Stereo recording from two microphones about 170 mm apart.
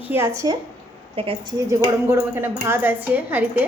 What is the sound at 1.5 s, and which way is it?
Speech, 20° right (ahead or behind).